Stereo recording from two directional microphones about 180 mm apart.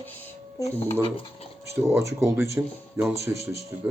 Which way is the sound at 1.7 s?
15° right (ahead or behind).